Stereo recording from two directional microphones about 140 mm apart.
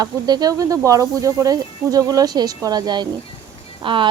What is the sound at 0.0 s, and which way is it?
Speech, 30° right (ahead or behind).